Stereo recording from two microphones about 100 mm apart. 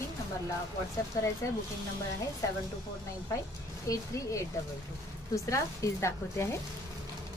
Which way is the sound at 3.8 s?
35° left (ahead or behind).